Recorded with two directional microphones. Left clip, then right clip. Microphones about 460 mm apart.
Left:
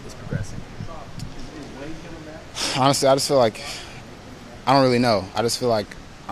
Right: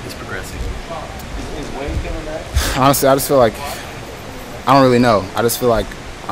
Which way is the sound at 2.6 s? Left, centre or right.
Left.